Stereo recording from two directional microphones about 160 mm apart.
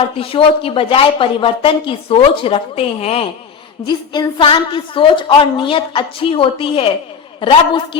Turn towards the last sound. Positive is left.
turn(degrees=30)  # may be behind; listen again after turning